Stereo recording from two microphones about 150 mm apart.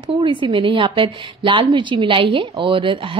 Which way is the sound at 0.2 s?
35° right (ahead or behind).